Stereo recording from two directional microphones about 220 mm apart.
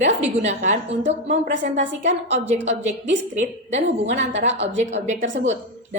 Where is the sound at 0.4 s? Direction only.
30° right (ahead or behind).